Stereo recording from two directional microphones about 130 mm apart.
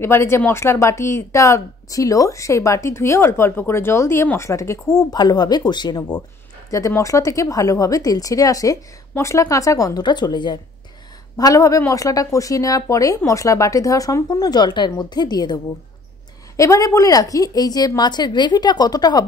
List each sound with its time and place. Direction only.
0.0 s speech: 20° left (ahead or behind)